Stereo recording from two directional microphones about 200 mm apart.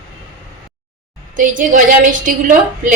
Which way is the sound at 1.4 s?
40° right (ahead or behind).